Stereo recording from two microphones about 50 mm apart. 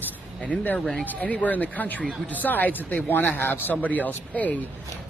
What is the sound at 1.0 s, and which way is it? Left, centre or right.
Speech, left.